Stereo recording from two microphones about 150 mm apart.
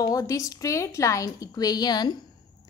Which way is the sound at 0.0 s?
20° left (ahead or behind).